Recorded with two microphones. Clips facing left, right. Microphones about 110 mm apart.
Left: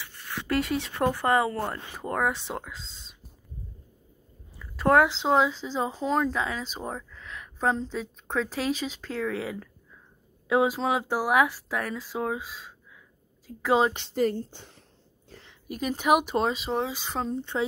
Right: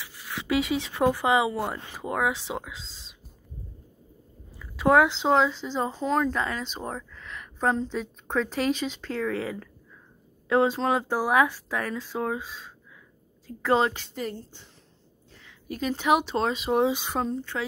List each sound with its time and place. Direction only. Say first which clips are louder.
0.0 s speech: even; 5° right (ahead or behind)
4.6 s speech: right 1 dB; centre (ahead or behind)
13.9 s a woman's voice: left 7 dB; 30° left (ahead or behind)
15.7 s speech: even; 10° left (ahead or behind)
16.4 s speech: right 1 dB; centre (ahead or behind)
16.7 s speech: right 6 dB; 15° right (ahead or behind)
17.4 s a woman's voice: left 3 dB; 20° left (ahead or behind)